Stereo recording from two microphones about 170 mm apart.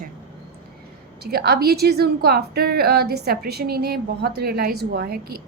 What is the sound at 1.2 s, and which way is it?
A woman's voice, 70° right (ahead or behind).